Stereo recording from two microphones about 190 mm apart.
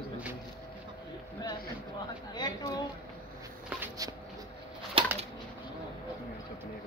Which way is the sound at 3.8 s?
20° right (ahead or behind).